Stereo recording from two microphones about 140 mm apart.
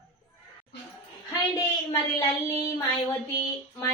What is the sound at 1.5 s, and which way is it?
Child singing, 25° left (ahead or behind).